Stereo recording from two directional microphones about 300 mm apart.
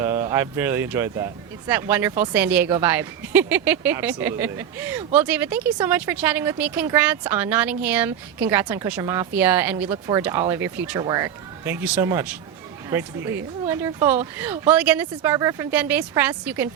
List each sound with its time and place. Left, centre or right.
0.0 s speech: centre